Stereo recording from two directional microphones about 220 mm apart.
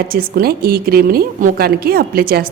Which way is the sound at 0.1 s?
40° right (ahead or behind).